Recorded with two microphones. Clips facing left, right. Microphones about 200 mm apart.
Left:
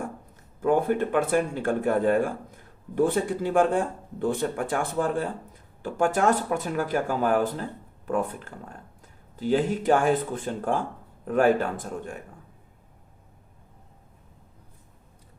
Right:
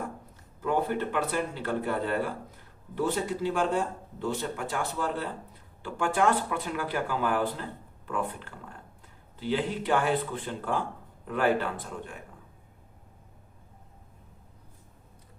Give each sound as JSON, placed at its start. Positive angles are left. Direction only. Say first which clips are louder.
{"t": 0.6, "sound": "speech", "louder": "left 5 dB", "side_deg": 50}